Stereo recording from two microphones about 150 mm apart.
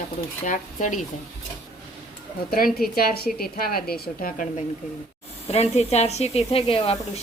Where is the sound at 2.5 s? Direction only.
80° left.